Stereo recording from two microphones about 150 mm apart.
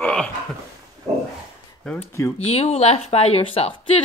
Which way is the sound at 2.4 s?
45° left (ahead or behind).